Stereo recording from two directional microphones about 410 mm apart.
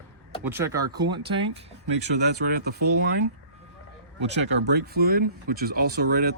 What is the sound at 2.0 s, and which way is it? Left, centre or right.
Speech, right.